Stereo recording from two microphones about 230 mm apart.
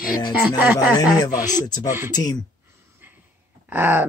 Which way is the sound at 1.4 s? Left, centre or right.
Centre.